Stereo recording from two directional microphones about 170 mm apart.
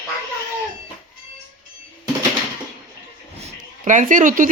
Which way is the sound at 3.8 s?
50° right (ahead or behind).